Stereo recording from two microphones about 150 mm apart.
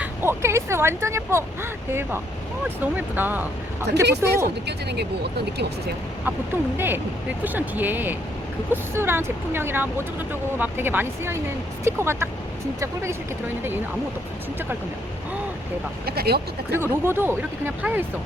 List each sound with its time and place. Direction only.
0.0 s speech: 15° right (ahead or behind)
4.6 s speech: 90° right
6.2 s speech: 15° right (ahead or behind)
16.0 s speech: 90° right
16.7 s speech: 15° right (ahead or behind)